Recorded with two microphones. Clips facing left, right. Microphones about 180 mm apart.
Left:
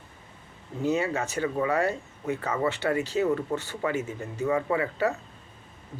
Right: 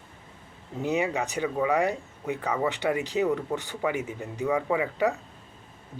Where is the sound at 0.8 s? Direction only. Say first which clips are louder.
Even; 15° right (ahead or behind).